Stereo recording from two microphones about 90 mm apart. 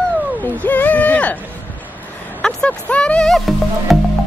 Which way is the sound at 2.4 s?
15° left (ahead or behind).